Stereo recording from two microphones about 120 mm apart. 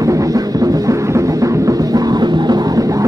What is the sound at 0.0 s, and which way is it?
Music, 30° right (ahead or behind).